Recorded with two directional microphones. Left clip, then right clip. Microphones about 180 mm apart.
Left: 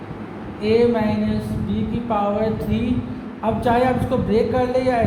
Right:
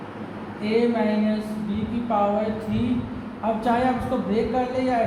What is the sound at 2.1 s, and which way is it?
Speech, 50° left (ahead or behind).